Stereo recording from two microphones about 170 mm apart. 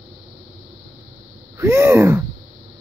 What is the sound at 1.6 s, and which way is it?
Speech, 15° right (ahead or behind).